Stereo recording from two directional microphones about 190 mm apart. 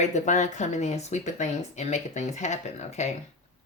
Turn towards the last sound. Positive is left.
turn(degrees=35)  # may be behind; listen again after turning